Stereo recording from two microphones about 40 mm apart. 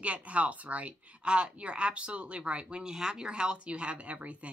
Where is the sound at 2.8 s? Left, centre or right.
Centre; by 4.4 s right.